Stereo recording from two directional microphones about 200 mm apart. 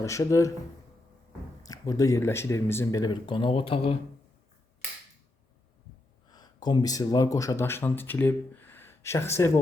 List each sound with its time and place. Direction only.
0.0 s speech: 15° left (ahead or behind)
1.6 s speech: 20° left (ahead or behind)
6.3 s speech: 20° left (ahead or behind)